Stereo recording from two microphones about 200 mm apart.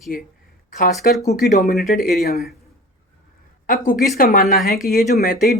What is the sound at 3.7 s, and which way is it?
Speech, 45° left (ahead or behind).